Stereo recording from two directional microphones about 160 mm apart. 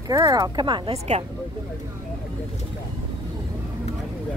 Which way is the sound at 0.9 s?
45° right (ahead or behind).